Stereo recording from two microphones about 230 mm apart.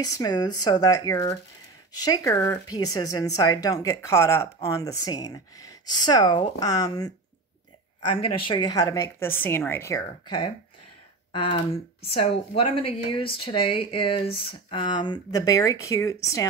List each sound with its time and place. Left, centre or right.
0.0 s speech: centre